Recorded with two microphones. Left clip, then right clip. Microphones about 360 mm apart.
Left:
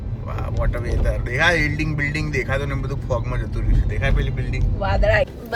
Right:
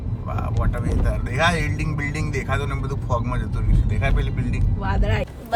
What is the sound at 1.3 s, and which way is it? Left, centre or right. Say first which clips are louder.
Speech: left 3 dB; centre.